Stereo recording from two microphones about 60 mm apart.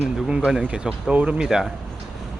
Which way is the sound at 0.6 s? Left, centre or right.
Centre.